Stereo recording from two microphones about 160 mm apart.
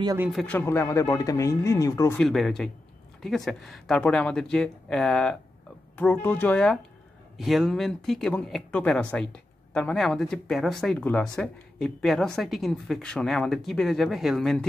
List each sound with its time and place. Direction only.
0.3 s speech: centre (ahead or behind)
0.6 s speech: 15° left (ahead or behind)
2.1 s speech: centre (ahead or behind)